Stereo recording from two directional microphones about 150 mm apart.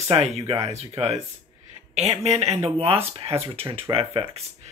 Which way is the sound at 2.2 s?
45° right (ahead or behind).